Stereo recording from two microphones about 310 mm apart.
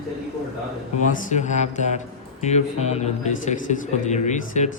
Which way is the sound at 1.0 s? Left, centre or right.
Left.